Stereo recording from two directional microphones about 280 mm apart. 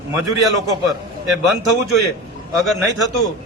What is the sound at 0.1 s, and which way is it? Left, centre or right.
A man's voice, centre.